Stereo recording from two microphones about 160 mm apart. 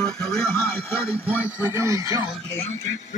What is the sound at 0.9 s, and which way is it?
Speech, 15° left (ahead or behind).